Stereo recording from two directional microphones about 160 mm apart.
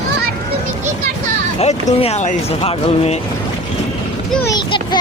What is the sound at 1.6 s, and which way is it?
Speech, 45° left (ahead or behind).